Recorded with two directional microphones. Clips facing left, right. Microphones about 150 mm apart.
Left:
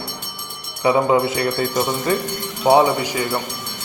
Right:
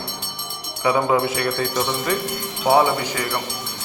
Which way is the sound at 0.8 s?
25° left (ahead or behind).